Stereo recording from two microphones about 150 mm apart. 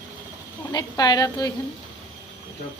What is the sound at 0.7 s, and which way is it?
Speech, 25° left (ahead or behind).